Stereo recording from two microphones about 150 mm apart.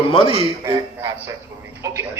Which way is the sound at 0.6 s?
20° right (ahead or behind).